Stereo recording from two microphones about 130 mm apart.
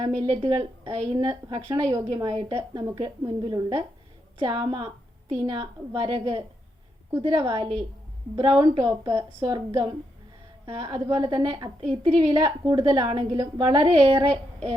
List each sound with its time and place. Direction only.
0.0 s a woman's voice: 40° right (ahead or behind)
1.2 s a woman's voice: 30° right (ahead or behind)
2.3 s a woman's voice: 45° right (ahead or behind)
2.9 s a woman's voice: 30° right (ahead or behind)
8.6 s a woman's voice: 25° right (ahead or behind); by 11.0 s 40° right (ahead or behind)
11.0 s a woman's voice: 25° right (ahead or behind)
11.3 s a woman's voice: 40° right (ahead or behind)